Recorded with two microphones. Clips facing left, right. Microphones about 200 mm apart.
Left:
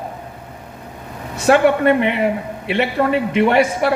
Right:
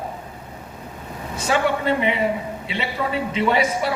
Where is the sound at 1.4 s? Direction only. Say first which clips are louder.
Left 8 dB; 65° left (ahead or behind).